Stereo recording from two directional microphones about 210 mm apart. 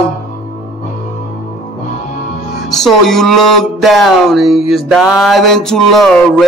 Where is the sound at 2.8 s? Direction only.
Centre (ahead or behind).